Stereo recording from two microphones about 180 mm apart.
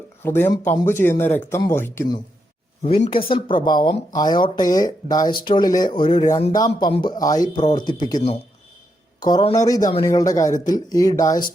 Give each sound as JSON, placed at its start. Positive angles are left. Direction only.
{"t": 0.2, "sound": "speech", "side_deg": 10}
{"t": 2.8, "sound": "speech", "side_deg": 35}